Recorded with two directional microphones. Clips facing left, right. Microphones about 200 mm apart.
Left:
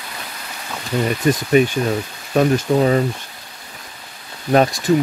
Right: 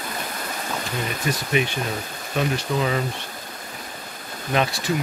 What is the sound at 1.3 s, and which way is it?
Speech, 45° left (ahead or behind).